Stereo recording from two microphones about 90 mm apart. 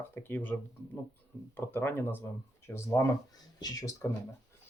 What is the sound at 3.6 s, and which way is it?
Speech, 45° left (ahead or behind).